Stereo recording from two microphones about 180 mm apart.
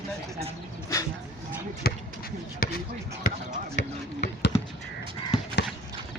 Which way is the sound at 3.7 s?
65° left (ahead or behind).